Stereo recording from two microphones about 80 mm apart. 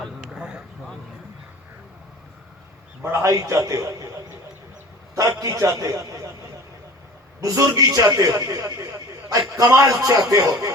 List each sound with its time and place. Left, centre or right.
0.3 s a sound: centre
3.0 s a man's voice: right
5.1 s a man's voice: right
7.4 s a man's voice: right